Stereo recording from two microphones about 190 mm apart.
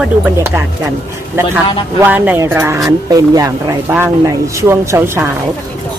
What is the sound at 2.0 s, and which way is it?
A woman's voice, 10° right (ahead or behind).